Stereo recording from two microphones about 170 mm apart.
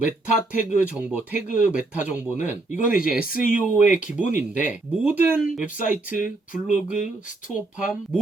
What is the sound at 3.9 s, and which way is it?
Speech, 50° left (ahead or behind).